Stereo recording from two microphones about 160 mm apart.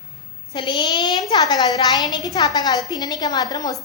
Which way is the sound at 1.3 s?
25° left (ahead or behind).